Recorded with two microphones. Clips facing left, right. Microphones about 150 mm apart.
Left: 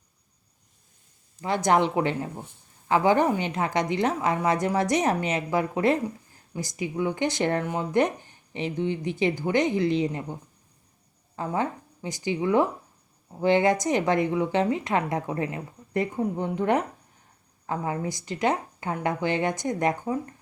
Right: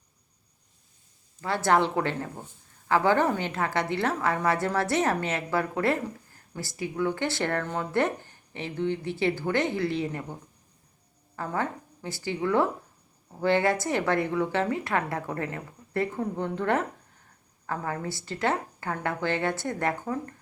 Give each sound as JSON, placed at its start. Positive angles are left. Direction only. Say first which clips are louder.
{"t": 1.4, "sound": "a woman's voice", "louder": "left 2 dB", "side_deg": 15}
{"t": 11.3, "sound": "a woman's voice", "louder": "left 3 dB", "side_deg": 15}